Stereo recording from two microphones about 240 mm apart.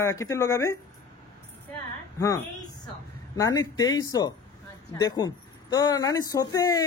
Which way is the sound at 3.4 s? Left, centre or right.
Centre.